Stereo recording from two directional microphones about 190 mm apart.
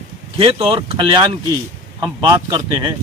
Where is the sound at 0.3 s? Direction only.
30° right (ahead or behind).